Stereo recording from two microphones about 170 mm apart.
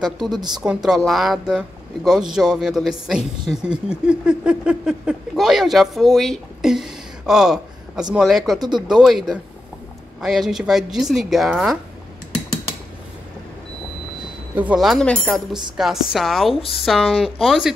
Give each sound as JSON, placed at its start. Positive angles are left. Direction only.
{"t": 0.3, "sound": "a woman's voice", "side_deg": -25}
{"t": 0.8, "sound": "a man's voice", "side_deg": 0}
{"t": 8.5, "sound": "a woman's voice", "side_deg": -25}
{"t": 8.8, "sound": "a man's voice", "side_deg": 0}
{"t": 14.5, "sound": "a man's voice", "side_deg": -10}